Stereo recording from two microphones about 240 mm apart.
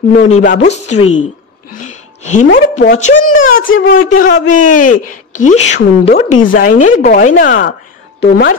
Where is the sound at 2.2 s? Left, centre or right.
Left.